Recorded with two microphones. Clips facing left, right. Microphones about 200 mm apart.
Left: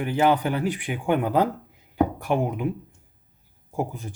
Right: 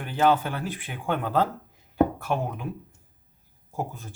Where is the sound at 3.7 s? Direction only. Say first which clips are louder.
Left 4 dB; 15° left (ahead or behind).